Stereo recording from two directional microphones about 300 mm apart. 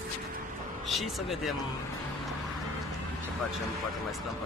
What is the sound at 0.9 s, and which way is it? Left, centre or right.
Speech, centre.